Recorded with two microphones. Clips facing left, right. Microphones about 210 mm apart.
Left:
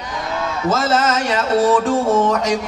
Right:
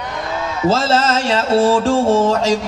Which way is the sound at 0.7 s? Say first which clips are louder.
Right 2 dB; 30° right (ahead or behind).